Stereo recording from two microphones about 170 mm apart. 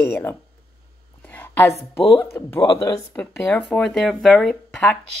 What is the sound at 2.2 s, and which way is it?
Speech, 15° left (ahead or behind).